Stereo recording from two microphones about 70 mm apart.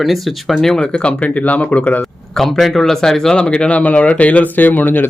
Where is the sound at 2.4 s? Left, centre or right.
Centre; by 5.0 s left.